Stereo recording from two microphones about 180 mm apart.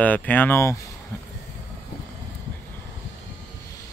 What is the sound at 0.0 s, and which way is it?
Speech, 10° left (ahead or behind).